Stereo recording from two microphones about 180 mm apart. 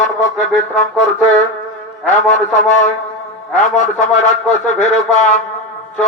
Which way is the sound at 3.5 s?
40° left (ahead or behind).